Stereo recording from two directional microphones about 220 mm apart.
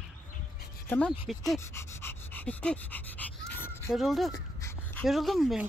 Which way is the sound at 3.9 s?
Centre (ahead or behind).